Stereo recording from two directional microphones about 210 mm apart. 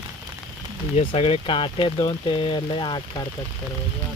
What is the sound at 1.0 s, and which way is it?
Speech, 30° left (ahead or behind).